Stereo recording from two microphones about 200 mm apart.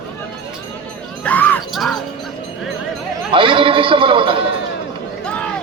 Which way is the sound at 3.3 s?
25° right (ahead or behind).